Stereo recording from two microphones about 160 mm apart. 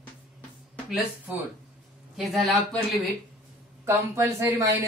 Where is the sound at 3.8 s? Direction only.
15° right (ahead or behind).